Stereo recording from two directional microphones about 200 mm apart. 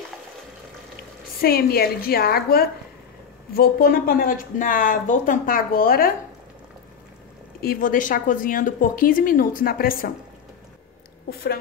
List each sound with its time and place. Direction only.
1.4 s speech: 50° left (ahead or behind)
7.6 s speech: 45° left (ahead or behind)
11.2 s speech: 50° left (ahead or behind)